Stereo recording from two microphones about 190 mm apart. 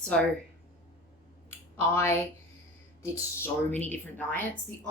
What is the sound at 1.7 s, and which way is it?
Speech, 15° left (ahead or behind).